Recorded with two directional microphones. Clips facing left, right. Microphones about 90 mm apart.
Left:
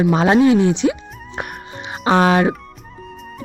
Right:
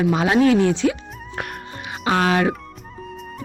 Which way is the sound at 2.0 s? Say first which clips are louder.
Left 4 dB; 25° left (ahead or behind).